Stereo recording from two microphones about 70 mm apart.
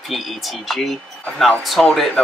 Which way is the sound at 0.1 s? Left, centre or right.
Centre.